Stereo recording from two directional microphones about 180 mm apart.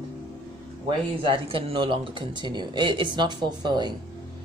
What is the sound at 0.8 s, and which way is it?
Speech, 30° right (ahead or behind).